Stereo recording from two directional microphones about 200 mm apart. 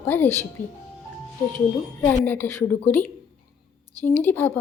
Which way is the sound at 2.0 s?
10° left (ahead or behind).